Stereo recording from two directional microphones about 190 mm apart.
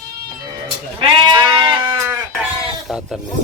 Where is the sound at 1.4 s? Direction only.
25° right (ahead or behind).